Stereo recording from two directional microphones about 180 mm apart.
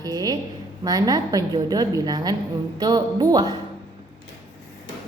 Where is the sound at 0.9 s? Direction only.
20° right (ahead or behind).